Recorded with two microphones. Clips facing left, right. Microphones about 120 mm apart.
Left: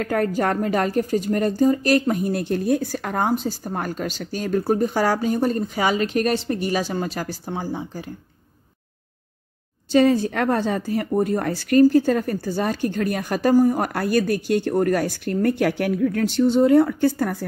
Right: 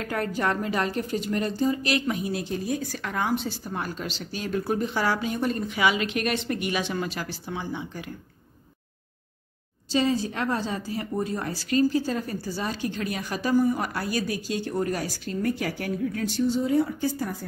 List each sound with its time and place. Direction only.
0.0 s a woman's voice: 45° left (ahead or behind)
9.9 s speech: 55° left (ahead or behind)